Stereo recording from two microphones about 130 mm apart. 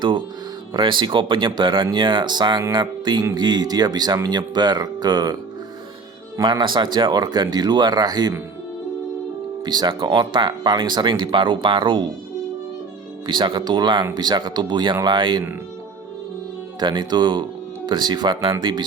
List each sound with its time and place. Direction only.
0.7 s speech: 40° right (ahead or behind)
9.6 s speech: 35° right (ahead or behind)
13.2 s speech: 35° right (ahead or behind)
16.8 s speech: 35° right (ahead or behind)